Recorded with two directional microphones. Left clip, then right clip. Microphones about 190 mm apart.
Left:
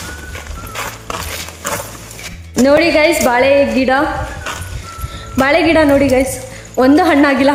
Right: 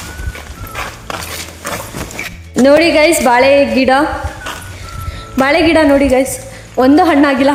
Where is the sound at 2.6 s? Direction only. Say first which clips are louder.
Right 2 dB; 15° right (ahead or behind).